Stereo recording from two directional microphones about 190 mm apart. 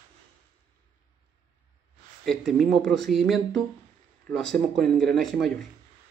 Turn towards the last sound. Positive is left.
turn(degrees=0)  # may be behind; listen again after turning